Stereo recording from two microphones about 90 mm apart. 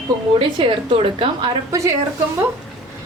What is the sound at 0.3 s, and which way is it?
A woman's voice, 75° right (ahead or behind).